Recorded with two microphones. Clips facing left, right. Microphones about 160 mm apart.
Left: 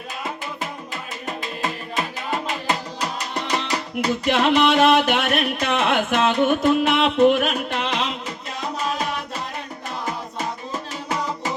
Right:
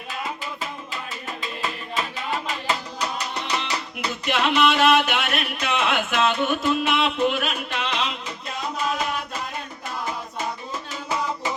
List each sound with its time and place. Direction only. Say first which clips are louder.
3.5 s music: left 5 dB; 45° left (ahead or behind)